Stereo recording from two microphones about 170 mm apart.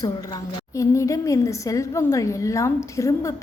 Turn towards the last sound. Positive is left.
turn(degrees=20)  # may be behind; listen again after turning